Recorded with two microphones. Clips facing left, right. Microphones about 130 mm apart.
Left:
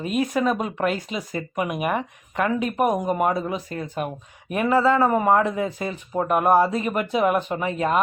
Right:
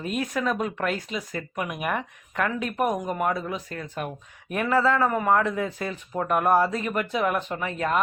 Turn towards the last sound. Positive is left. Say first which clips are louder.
# left 4 dB
turn(degrees=10)  # may be behind; listen again after turning